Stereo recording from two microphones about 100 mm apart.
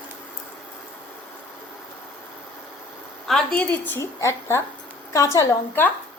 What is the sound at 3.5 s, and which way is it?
A woman's voice, 20° left (ahead or behind).